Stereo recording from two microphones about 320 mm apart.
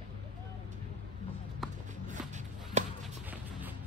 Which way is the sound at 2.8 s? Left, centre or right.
Right.